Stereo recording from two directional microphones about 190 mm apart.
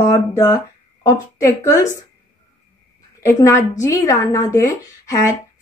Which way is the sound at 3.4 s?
15° left (ahead or behind).